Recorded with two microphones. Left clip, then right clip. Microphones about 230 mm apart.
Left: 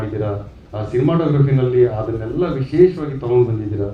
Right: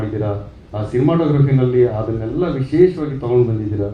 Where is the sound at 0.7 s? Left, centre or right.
Left.